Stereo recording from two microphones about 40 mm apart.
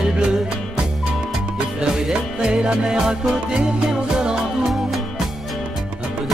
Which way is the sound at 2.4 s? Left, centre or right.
Right.